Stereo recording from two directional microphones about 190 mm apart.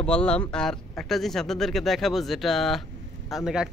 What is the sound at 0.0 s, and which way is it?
Speech, 5° left (ahead or behind).